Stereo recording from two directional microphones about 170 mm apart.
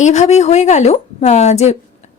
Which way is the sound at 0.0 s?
40° left (ahead or behind).